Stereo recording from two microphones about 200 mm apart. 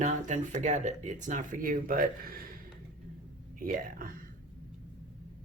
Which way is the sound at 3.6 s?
45° right (ahead or behind).